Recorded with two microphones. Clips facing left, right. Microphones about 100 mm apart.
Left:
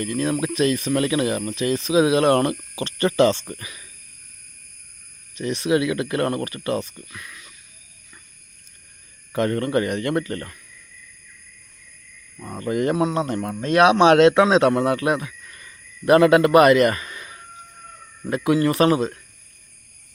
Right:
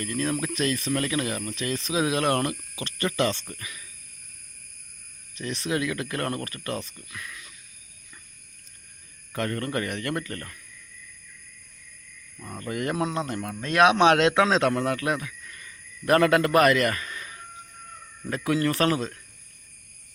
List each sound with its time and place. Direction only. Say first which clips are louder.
0.0 s speech: left 5 dB; 15° left (ahead or behind)
2.3 s speech: left 7 dB; 35° left (ahead or behind)
5.3 s speech: left 8 dB; 15° left (ahead or behind)
9.3 s speech: left 8 dB; 20° left (ahead or behind)
12.4 s speech: left 8 dB; 25° left (ahead or behind)
13.2 s speech: left 6 dB; 35° left (ahead or behind)
13.6 s speech: left 4 dB; 20° left (ahead or behind)